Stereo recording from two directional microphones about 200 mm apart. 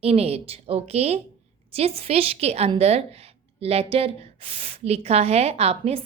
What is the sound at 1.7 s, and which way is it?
A woman's voice, 30° right (ahead or behind).